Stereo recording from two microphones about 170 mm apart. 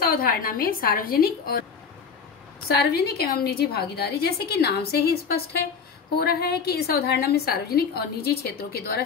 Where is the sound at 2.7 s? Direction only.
70° left (ahead or behind).